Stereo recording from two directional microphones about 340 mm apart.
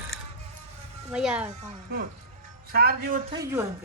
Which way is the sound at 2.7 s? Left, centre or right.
Right.